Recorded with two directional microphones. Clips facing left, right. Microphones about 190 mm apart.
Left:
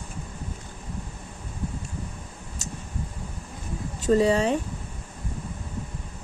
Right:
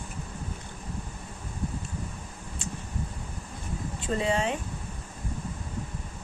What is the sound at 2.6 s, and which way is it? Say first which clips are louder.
Vehicle: right 1 dB; 40° left (ahead or behind).